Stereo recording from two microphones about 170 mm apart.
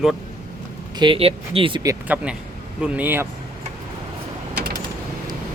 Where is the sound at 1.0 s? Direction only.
30° right (ahead or behind).